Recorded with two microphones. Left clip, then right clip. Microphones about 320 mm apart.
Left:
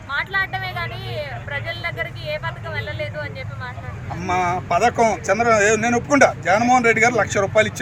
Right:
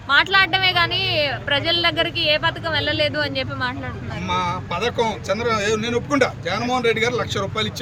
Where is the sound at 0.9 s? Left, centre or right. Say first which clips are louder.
Right 9 dB; right.